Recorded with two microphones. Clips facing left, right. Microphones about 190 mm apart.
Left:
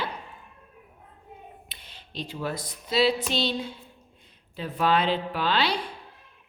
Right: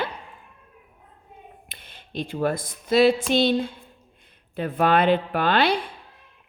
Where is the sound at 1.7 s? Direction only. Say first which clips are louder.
Right 5 dB; 50° right (ahead or behind).